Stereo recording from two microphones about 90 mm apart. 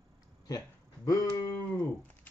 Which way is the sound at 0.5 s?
40° left (ahead or behind).